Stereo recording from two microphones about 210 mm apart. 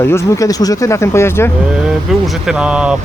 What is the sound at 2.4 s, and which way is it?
Speech, 5° right (ahead or behind).